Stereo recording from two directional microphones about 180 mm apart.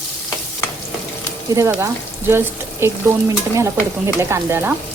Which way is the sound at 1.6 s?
15° right (ahead or behind).